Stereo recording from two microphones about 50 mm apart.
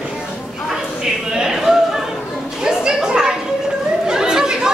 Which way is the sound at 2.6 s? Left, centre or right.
Centre.